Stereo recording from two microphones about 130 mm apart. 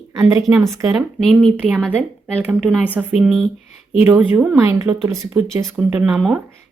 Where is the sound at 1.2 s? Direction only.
5° left (ahead or behind).